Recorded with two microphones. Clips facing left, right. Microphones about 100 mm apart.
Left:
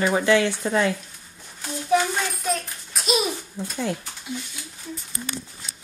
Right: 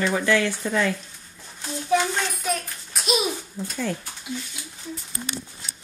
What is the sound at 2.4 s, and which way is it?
Babbling, centre (ahead or behind).